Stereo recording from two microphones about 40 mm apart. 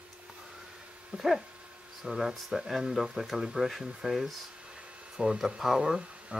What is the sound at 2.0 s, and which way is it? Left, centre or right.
Speech, centre.